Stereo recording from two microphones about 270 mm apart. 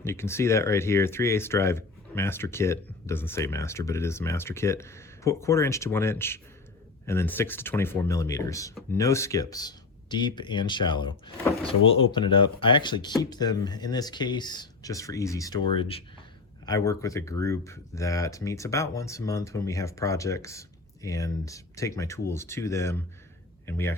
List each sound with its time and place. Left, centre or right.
0.0 s speech: centre